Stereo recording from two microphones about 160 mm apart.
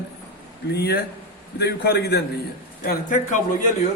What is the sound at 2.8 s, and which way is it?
Speech, 55° left (ahead or behind).